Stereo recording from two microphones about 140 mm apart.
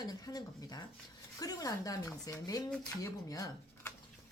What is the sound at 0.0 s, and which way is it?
A woman's voice, 25° left (ahead or behind).